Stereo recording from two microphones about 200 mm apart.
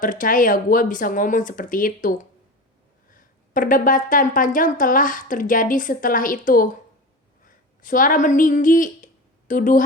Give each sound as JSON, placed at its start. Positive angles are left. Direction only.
{"t": 0.0, "sound": "a woman's voice", "side_deg": 40}